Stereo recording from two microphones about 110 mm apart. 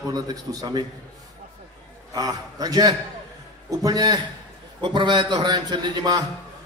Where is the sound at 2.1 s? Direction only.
35° right (ahead or behind).